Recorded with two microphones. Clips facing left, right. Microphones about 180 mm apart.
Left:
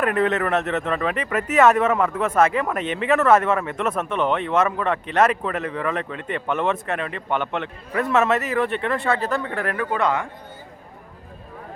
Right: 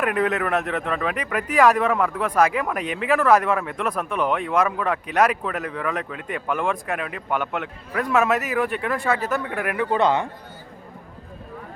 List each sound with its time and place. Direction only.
0.0 s speech: 5° right (ahead or behind)
9.9 s a man's voice: 30° right (ahead or behind)